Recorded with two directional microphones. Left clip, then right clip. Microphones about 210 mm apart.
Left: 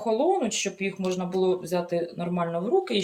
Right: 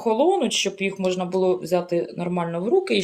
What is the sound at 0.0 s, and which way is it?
Speech, 45° right (ahead or behind).